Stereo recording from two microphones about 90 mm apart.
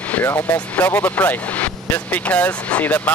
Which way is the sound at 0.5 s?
15° left (ahead or behind).